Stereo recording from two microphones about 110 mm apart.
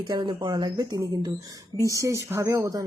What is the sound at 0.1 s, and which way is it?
Speech, 45° right (ahead or behind).